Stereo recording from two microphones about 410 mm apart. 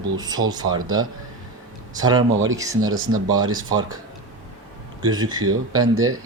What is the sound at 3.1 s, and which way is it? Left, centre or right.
Speech, centre.